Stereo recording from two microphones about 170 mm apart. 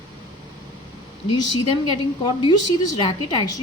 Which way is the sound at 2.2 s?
25° left (ahead or behind).